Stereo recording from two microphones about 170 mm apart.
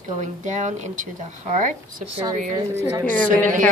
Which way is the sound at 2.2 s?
20° right (ahead or behind).